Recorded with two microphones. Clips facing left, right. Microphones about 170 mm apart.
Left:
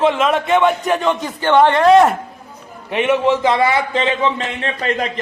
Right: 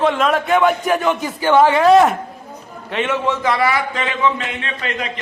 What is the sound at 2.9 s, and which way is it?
A man's voice, 15° left (ahead or behind).